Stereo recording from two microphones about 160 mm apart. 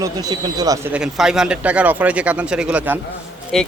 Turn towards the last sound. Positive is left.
turn(degrees=5)  # may be behind; listen again after turning